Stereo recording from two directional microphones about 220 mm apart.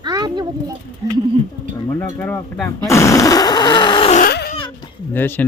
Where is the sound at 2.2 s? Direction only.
5° left (ahead or behind).